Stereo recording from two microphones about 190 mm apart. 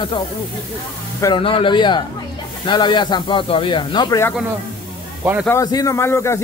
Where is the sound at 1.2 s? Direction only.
25° left (ahead or behind).